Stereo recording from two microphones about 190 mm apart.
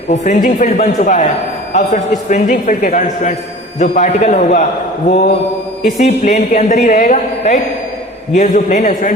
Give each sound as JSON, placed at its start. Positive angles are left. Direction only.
{"t": 0.1, "sound": "a man's voice", "side_deg": 40}